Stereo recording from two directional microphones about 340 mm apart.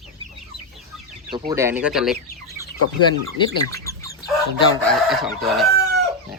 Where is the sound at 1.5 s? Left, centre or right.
Centre.